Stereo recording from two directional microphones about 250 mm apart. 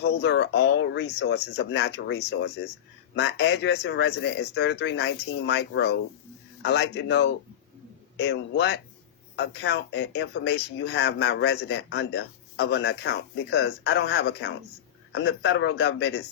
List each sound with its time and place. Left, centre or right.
0.0 s speech: left